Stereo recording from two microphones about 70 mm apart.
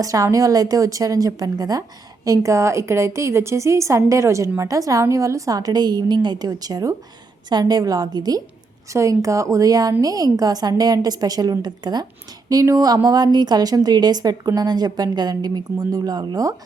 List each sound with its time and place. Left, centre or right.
0.0 s a woman's voice: right
8.9 s a woman's voice: right
11.6 s speech: right
12.5 s a woman's voice: right